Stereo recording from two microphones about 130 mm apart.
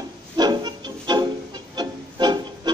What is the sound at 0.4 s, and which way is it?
Music, 30° right (ahead or behind).